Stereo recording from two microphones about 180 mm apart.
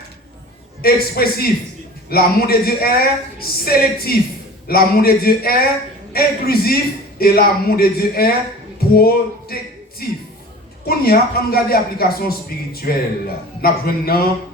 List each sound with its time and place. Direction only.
0.8 s a woman's voice: 55° left (ahead or behind)
10.8 s a woman's voice: 55° left (ahead or behind)